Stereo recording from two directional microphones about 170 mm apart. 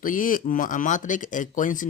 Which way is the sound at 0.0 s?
55° left (ahead or behind).